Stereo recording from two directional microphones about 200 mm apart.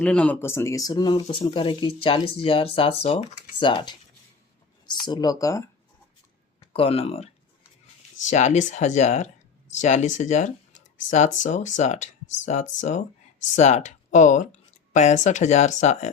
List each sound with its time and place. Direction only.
0.0 s speech: 5° left (ahead or behind); by 3.9 s 25° left (ahead or behind)
5.0 s speech: 20° left (ahead or behind)
6.7 s speech: 30° left (ahead or behind)
8.3 s speech: 35° left (ahead or behind)